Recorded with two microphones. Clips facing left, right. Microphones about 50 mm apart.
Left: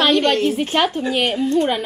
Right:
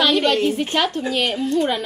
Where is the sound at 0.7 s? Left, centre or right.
Centre.